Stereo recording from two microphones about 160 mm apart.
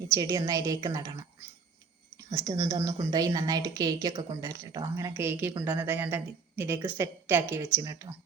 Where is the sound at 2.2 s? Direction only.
20° right (ahead or behind).